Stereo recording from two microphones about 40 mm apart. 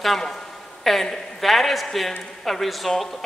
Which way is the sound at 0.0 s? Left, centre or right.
Centre.